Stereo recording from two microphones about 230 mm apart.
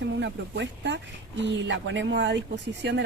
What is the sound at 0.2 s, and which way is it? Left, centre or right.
Speech, right.